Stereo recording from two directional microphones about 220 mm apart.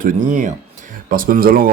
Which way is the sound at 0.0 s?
35° right (ahead or behind).